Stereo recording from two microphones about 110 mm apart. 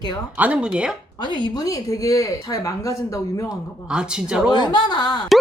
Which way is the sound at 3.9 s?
5° right (ahead or behind).